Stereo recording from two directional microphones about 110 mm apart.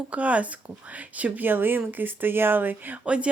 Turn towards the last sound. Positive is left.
turn(degrees=-10)  # may be behind; listen again after turning